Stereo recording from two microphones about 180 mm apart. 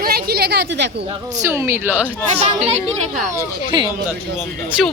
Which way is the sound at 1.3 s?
15° right (ahead or behind).